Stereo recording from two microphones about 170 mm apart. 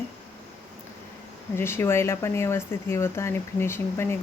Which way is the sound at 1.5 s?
15° left (ahead or behind).